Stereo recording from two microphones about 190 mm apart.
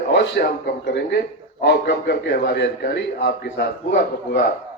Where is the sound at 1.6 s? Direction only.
60° left (ahead or behind).